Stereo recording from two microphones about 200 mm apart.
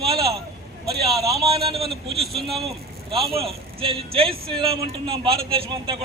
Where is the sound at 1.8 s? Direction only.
Centre (ahead or behind).